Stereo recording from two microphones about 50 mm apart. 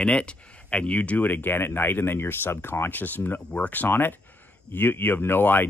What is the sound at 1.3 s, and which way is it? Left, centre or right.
Speech, left.